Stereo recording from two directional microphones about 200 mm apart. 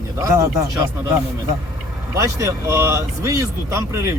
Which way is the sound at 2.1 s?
15° right (ahead or behind).